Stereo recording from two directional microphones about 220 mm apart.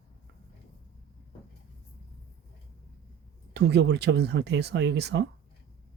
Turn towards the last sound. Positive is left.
turn(degrees=-50)  # may be behind; listen again after turning